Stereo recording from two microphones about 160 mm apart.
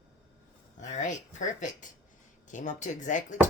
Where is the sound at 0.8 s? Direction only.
50° left (ahead or behind).